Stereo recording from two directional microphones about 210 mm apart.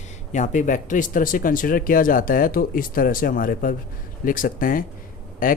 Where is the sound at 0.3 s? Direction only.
35° left (ahead or behind).